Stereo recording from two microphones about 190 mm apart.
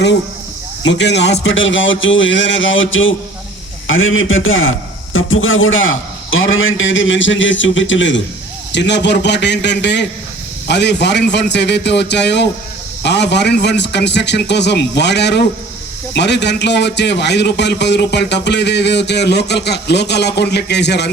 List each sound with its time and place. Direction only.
0.9 s a man's voice: 65° left (ahead or behind)
8.7 s a man's voice: 65° left (ahead or behind)